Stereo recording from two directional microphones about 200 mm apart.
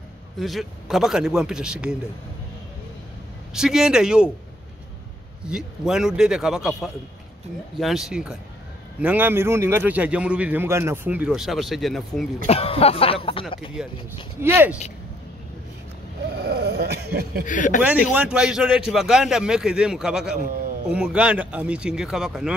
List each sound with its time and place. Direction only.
0.4 s speech: centre (ahead or behind)
3.5 s speech: 5° right (ahead or behind)
5.5 s a man's voice: 5° right (ahead or behind)
12.4 s speech: 30° left (ahead or behind)
13.8 s a man's voice: 5° right (ahead or behind)
16.3 s a sound: 55° right (ahead or behind)
17.5 s speech: 40° left (ahead or behind)
17.8 s speech: 5° right (ahead or behind)